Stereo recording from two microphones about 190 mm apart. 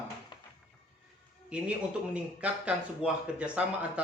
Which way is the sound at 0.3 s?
25° left (ahead or behind).